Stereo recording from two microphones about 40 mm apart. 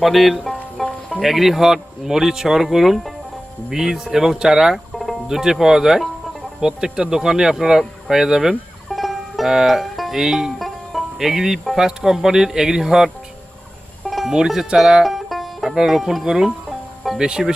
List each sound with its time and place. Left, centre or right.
0.0 s speech: centre
0.8 s music: centre
1.2 s speech: centre
8.9 s music: centre
9.5 s speech: centre
14.0 s music: centre
14.3 s speech: centre
15.0 s music: centre
15.7 s speech: centre